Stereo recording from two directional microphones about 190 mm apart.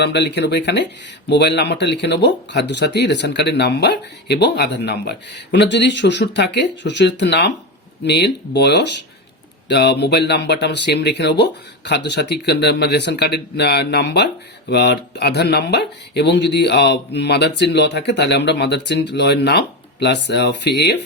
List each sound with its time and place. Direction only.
0.0 s speech: 60° left (ahead or behind)